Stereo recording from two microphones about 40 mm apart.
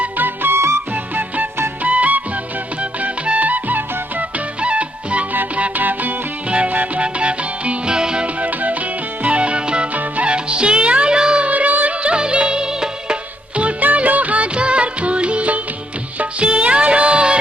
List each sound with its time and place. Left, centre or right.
0.2 s music: right
1.8 s music: right
3.2 s music: right
4.6 s music: right
7.0 s music: right
8.4 s music: right
9.9 s music: right
10.3 s music: right
11.4 s a sound: right
11.9 s music: right
13.8 s music of bollywood: right
16.1 s music: right